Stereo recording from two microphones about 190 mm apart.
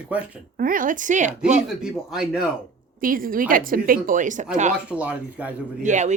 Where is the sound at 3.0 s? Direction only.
50° right (ahead or behind).